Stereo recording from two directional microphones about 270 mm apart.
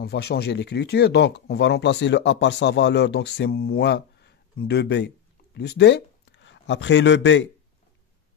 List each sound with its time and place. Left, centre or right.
0.0 s speech: left